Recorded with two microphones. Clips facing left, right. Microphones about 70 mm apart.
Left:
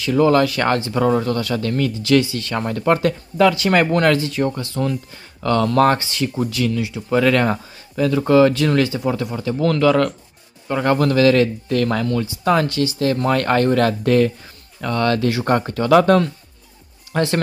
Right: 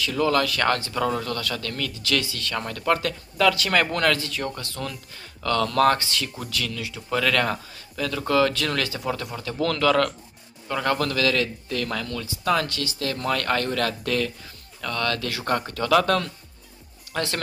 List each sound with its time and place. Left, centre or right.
0.0 s speech: left
10.7 s speech: left